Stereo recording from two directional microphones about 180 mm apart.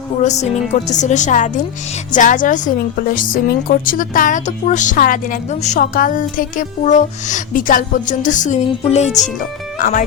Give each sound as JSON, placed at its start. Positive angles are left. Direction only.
{"t": 0.2, "sound": "a woman's voice", "side_deg": 40}